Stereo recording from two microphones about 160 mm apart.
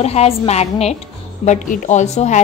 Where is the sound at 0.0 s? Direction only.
40° left (ahead or behind).